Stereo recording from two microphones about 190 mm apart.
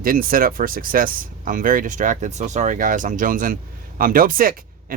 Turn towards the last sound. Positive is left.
turn(degrees=-50)  # may be behind; listen again after turning